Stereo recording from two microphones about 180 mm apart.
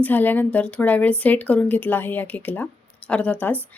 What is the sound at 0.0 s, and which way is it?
A woman's voice, 10° left (ahead or behind).